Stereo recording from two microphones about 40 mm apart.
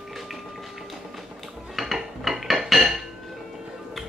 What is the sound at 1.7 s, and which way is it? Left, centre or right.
Dishes, centre.